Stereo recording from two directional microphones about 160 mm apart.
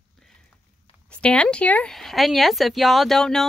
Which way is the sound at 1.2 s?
5° left (ahead or behind).